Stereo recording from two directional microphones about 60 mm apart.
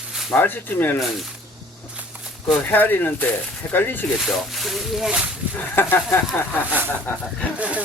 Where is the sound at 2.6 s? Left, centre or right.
Left.